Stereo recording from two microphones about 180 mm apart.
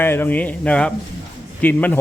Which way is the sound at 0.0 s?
10° left (ahead or behind).